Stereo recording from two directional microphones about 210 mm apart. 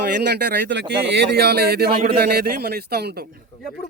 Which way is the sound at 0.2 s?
50° right (ahead or behind).